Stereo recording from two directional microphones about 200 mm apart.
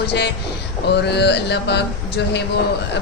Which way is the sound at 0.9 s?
55° left (ahead or behind).